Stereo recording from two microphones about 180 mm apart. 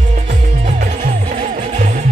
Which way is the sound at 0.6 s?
30° right (ahead or behind).